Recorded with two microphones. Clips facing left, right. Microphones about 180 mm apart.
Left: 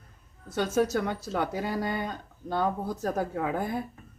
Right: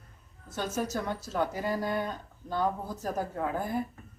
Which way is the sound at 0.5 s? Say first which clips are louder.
Left 6 dB; 70° left (ahead or behind).